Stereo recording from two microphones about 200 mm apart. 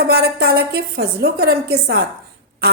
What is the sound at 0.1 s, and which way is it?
A woman's voice, 55° right (ahead or behind).